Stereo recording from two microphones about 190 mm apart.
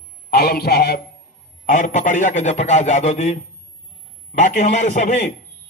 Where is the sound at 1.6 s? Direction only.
40° left (ahead or behind).